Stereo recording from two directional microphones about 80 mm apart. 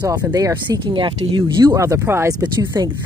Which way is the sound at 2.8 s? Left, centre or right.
Right.